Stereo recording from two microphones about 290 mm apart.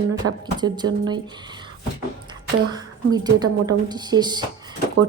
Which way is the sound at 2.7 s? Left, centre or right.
Centre.